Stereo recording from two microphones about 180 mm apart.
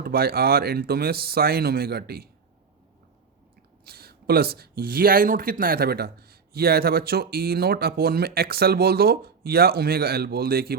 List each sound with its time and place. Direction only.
0.0 s speech: 60° right (ahead or behind)
3.8 s speech: 60° right (ahead or behind)